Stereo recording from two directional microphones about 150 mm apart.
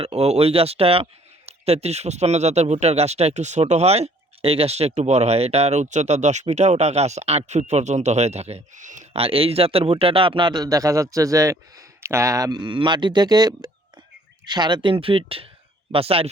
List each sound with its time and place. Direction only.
0.0 s speech: 45° right (ahead or behind)
9.1 s a man's voice: 40° right (ahead or behind)